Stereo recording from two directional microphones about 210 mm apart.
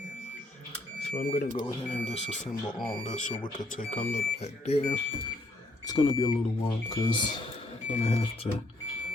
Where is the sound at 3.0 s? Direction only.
35° left (ahead or behind).